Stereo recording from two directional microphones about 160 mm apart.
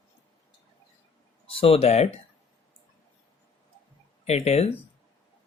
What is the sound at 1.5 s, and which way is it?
Speech, 35° left (ahead or behind).